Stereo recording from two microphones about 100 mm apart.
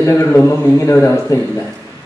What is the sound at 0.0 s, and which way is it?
A man's voice, 25° left (ahead or behind).